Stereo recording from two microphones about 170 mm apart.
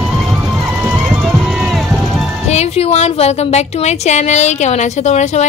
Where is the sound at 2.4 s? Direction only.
40° left (ahead or behind).